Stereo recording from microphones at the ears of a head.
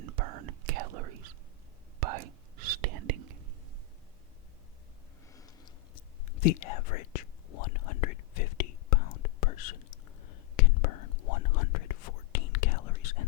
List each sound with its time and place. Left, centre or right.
0.0 s whispering: right
5.6 s whispering: left